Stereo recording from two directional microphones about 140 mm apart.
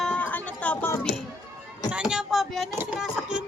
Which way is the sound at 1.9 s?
5° right (ahead or behind).